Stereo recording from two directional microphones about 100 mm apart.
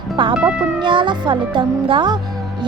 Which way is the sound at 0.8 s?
55° right (ahead or behind).